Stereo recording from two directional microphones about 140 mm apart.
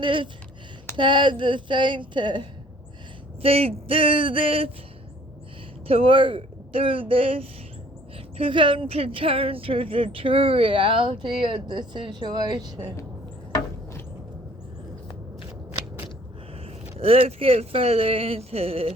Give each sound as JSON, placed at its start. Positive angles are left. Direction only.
{"t": 0.0, "sound": "speech", "side_deg": -35}
{"t": 3.4, "sound": "speech", "side_deg": -45}
{"t": 5.9, "sound": "speech", "side_deg": -40}
{"t": 17.0, "sound": "speech", "side_deg": -45}